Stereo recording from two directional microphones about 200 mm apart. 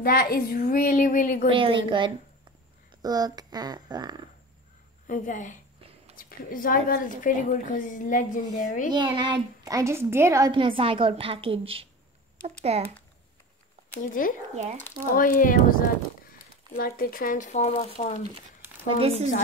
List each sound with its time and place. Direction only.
0.0 s speech: 45° left (ahead or behind)
1.5 s a child's voice: 25° right (ahead or behind)
5.0 s a woman's voice: 40° left (ahead or behind)
8.9 s a child's voice: 20° right (ahead or behind)
14.5 s speech: 35° right (ahead or behind)
15.1 s a woman's voice: 45° left (ahead or behind)
18.6 s a sound: 10° right (ahead or behind)
18.9 s a child's voice: 30° right (ahead or behind)